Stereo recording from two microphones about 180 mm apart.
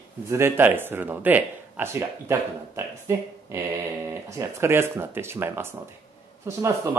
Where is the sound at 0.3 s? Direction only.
10° right (ahead or behind).